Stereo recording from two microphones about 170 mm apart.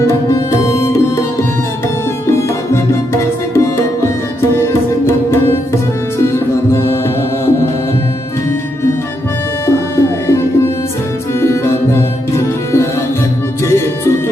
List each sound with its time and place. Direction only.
0.0 s music: 20° left (ahead or behind)
2.2 s music: 15° left (ahead or behind)
4.5 s tabla: 15° left (ahead or behind)
6.1 s music: 15° left (ahead or behind)
9.6 s music: 15° left (ahead or behind)
13.7 s music: 15° left (ahead or behind)